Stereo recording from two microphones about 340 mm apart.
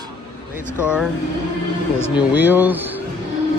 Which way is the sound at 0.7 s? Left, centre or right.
Centre.